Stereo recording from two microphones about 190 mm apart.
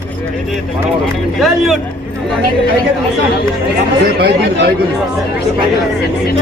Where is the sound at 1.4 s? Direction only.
Centre (ahead or behind).